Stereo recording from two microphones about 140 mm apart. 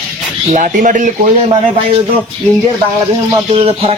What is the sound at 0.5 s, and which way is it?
Speech, 65° right (ahead or behind).